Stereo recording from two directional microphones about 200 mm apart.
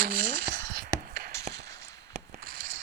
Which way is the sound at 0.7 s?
50° right (ahead or behind).